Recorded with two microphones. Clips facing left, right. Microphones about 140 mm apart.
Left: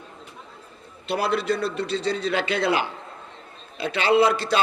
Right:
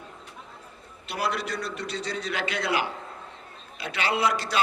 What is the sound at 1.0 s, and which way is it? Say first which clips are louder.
A man's voice: left 6 dB; 30° left (ahead or behind).